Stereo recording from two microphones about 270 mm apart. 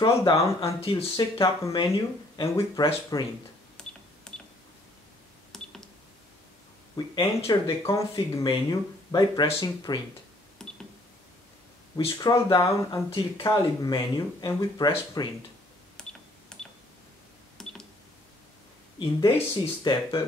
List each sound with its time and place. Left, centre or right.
0.0 s speech: centre
3.8 s cash register: centre
5.5 s a sound: centre
7.2 s speech: centre
10.6 s a sound: centre
12.0 s speech: centre
16.0 s cash register: centre
18.9 s speech: centre